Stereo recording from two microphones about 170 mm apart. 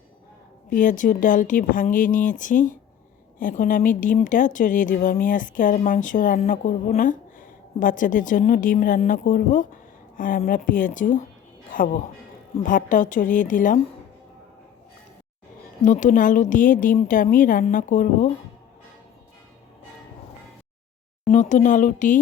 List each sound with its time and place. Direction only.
0.7 s a woman's voice: 50° left (ahead or behind)
15.8 s a woman's voice: 50° left (ahead or behind)
21.2 s a woman's voice: 45° left (ahead or behind)